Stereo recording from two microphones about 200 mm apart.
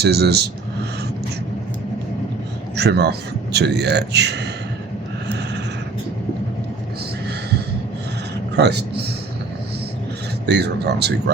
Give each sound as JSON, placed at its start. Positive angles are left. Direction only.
{"t": 0.0, "sound": "speech", "side_deg": -55}
{"t": 2.7, "sound": "a man's voice", "side_deg": -55}
{"t": 8.5, "sound": "a man's voice", "side_deg": -55}
{"t": 10.4, "sound": "a man's voice", "side_deg": -60}